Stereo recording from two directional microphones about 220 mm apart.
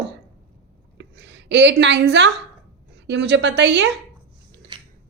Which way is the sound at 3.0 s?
50° right (ahead or behind).